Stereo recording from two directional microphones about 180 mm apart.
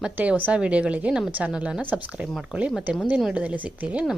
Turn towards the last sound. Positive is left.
turn(degrees=-5)  # may be behind; listen again after turning